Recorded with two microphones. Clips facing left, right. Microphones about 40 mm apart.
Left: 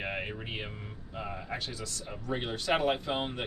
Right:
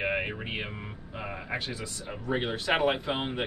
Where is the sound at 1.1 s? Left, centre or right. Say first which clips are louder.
Right 3 dB; right.